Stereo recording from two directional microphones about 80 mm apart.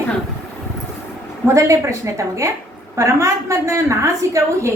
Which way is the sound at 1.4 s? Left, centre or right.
Right.